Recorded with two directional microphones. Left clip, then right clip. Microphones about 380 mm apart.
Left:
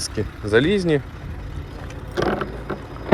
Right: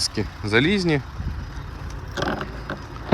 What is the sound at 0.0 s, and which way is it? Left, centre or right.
Speech, centre.